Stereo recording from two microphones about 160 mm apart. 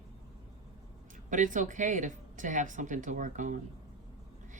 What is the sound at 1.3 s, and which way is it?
Speech, 55° right (ahead or behind).